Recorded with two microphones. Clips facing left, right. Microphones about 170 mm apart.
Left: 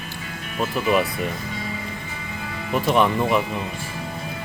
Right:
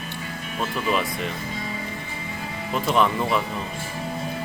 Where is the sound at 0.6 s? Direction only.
10° left (ahead or behind).